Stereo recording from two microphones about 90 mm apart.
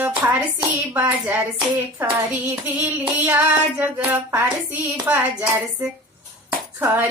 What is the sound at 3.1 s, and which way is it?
Child singing, 20° right (ahead or behind).